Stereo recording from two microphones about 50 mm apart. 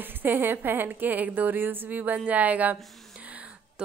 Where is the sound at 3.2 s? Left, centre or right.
Right.